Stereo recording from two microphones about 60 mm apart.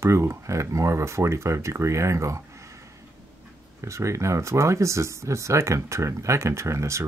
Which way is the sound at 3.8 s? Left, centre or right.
Right.